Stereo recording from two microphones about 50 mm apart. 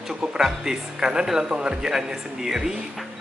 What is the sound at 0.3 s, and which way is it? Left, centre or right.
Speech, centre.